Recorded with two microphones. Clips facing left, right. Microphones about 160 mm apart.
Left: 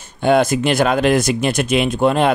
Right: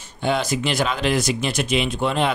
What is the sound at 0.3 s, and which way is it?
Speech, 55° left (ahead or behind).